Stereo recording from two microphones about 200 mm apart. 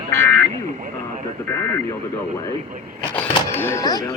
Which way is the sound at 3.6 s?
15° left (ahead or behind).